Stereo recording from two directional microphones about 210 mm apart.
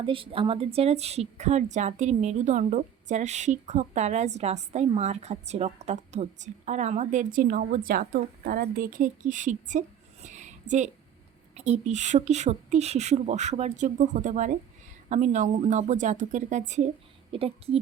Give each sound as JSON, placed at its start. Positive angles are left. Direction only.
{"t": 0.0, "sound": "a woman's voice", "side_deg": -25}